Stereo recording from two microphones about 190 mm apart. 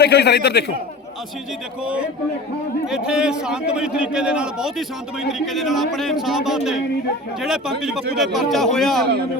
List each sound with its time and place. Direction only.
0.0 s a man's voice: 60° left (ahead or behind)
1.8 s a man's voice: 5° right (ahead or behind)